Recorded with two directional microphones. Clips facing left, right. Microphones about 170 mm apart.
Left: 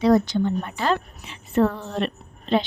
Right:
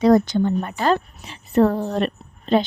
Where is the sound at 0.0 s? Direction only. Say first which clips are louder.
Right 3 dB; 45° right (ahead or behind).